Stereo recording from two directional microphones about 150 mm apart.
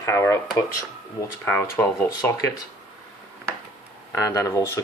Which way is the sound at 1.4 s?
10° left (ahead or behind).